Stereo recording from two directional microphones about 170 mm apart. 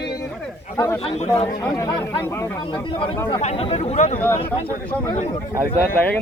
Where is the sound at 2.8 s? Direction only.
30° left (ahead or behind).